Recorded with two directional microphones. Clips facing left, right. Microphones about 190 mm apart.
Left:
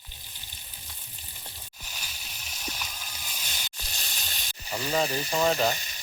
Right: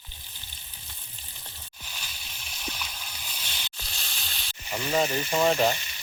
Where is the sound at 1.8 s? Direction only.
10° left (ahead or behind).